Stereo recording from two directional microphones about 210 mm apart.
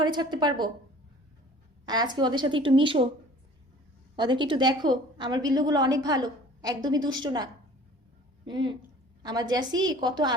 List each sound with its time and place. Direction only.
0.0 s a woman's voice: 20° right (ahead or behind)
1.9 s a woman's voice: 20° right (ahead or behind)
4.1 s a woman's voice: 20° right (ahead or behind)
8.4 s a woman's voice: 20° right (ahead or behind)